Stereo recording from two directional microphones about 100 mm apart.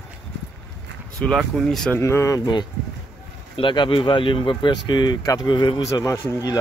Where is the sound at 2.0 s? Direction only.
30° left (ahead or behind).